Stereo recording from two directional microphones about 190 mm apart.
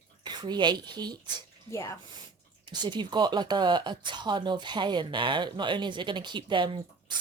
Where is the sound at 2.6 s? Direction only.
20° right (ahead or behind).